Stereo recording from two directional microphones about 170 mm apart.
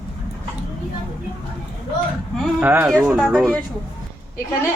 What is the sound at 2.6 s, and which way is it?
Speech, 10° right (ahead or behind).